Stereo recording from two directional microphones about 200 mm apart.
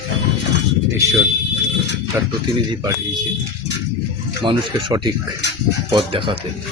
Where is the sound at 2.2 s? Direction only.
15° right (ahead or behind).